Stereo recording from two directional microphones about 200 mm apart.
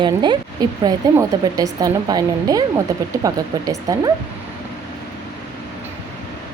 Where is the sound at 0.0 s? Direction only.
25° right (ahead or behind).